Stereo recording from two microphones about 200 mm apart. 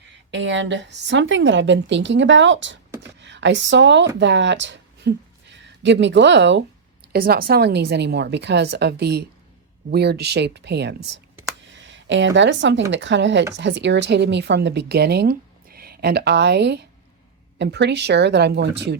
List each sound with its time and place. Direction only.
0.3 s speech: 65° right (ahead or behind)
7.1 s speech: 50° right (ahead or behind)